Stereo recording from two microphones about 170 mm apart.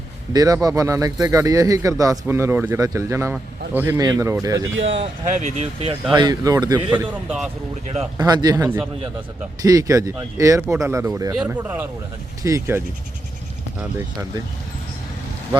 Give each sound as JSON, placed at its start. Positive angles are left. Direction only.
{"t": 0.3, "sound": "speech", "side_deg": -20}
{"t": 4.9, "sound": "speech", "side_deg": -45}
{"t": 6.1, "sound": "speech", "side_deg": -25}
{"t": 6.7, "sound": "speech", "side_deg": -10}
{"t": 8.2, "sound": "speech", "side_deg": -25}
{"t": 11.3, "sound": "speech", "side_deg": -10}